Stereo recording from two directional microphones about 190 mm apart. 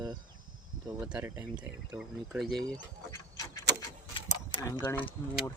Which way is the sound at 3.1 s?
20° left (ahead or behind).